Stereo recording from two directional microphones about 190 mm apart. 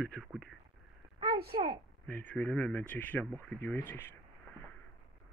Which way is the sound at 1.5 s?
25° right (ahead or behind).